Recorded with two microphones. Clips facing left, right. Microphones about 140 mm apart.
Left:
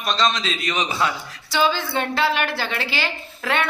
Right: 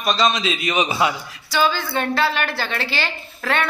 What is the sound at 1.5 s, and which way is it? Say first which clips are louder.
A woman's voice: right 1 dB; 20° left (ahead or behind).